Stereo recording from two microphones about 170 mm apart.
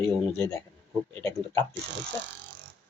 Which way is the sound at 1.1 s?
15° left (ahead or behind).